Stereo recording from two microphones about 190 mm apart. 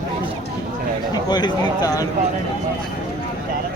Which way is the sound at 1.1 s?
20° left (ahead or behind).